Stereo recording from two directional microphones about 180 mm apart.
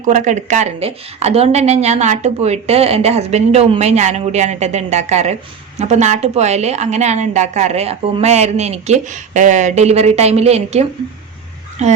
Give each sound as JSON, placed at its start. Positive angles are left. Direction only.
{"t": 0.0, "sound": "a woman's voice", "side_deg": -45}